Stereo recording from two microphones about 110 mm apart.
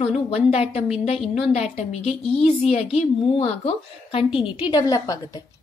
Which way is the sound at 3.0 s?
80° left.